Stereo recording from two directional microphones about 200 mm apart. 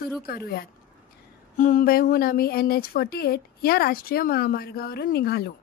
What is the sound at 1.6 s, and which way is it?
Speech, 40° left (ahead or behind).